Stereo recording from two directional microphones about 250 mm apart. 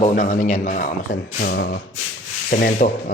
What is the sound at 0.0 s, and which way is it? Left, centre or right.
A man's voice, left.